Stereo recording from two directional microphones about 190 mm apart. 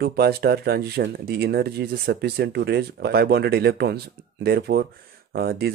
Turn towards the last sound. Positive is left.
turn(degrees=-55)  # may be behind; listen again after turning